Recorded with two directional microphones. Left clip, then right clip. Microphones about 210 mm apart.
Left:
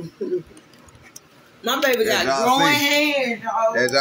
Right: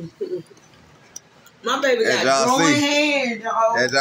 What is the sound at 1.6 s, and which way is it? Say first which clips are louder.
Speech: even; 45° left (ahead or behind).